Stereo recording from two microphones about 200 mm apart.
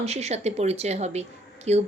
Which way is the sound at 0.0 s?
30° right (ahead or behind).